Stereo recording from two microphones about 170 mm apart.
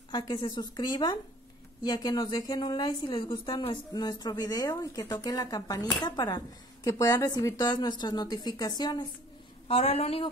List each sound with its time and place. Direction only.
0.1 s a woman's voice: 25° left (ahead or behind)
9.7 s a woman's voice: 35° left (ahead or behind)